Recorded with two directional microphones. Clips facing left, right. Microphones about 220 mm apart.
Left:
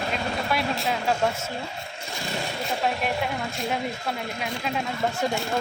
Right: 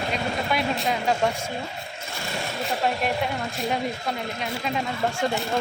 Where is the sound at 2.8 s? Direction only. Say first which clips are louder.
Right 1 dB; centre (ahead or behind).